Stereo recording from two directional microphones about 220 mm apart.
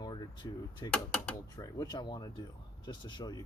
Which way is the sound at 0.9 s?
5° left (ahead or behind).